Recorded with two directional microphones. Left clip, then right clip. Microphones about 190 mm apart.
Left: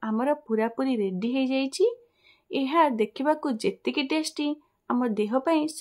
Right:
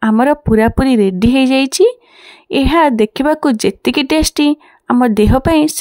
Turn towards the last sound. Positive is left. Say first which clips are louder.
# right 12 dB
turn(degrees=-60)  # may be behind; listen again after turning